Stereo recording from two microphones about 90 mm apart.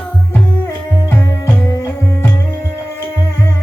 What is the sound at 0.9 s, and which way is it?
Music, 20° left (ahead or behind).